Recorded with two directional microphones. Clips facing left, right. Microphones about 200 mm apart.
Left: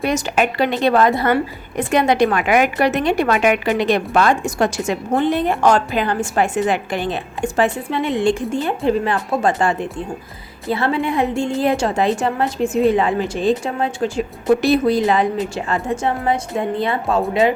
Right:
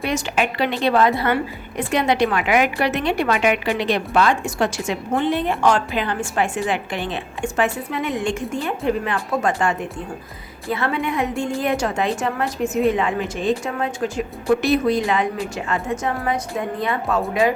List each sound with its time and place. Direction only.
0.0 s a woman's voice: 45° left (ahead or behind)
10.7 s a woman's voice: 30° left (ahead or behind)